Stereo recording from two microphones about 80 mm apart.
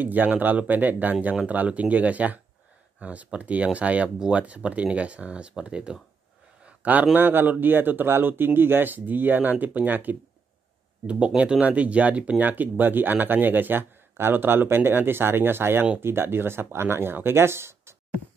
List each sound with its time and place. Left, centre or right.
0.0 s speech: right
6.6 s a sound: centre
7.2 s speech: right